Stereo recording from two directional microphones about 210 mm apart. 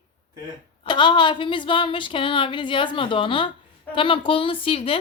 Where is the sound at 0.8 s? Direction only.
20° left (ahead or behind).